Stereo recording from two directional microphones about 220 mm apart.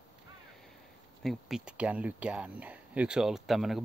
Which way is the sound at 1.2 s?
5° right (ahead or behind).